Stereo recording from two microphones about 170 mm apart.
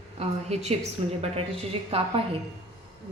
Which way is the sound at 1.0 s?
40° right (ahead or behind).